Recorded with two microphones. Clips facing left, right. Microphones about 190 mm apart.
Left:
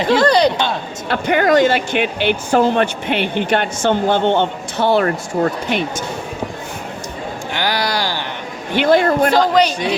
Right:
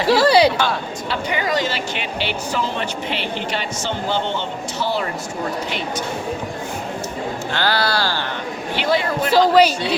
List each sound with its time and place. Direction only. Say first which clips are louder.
0.1 s speech: even; 5° right (ahead or behind)
1.1 s speech: left 9 dB; 55° left (ahead or behind)
7.5 s speech: left 1 dB; 15° left (ahead or behind)
8.7 s a man's voice: left 7 dB; 50° left (ahead or behind)
9.3 s speech: even; 5° right (ahead or behind)